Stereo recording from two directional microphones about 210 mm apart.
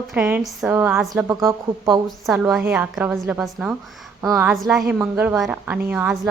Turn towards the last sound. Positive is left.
turn(degrees=-5)  # may be behind; listen again after turning